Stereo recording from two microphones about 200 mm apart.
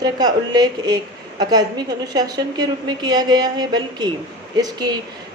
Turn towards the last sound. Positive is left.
turn(degrees=-20)  # may be behind; listen again after turning